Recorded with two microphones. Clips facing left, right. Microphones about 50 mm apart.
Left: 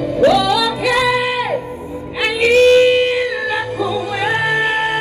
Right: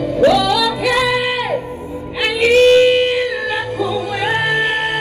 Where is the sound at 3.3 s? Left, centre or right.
Left.